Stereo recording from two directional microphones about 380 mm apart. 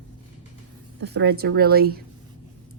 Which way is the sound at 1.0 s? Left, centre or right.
Right.